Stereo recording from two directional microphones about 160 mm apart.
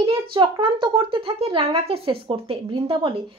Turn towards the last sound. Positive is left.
turn(degrees=-35)  # may be behind; listen again after turning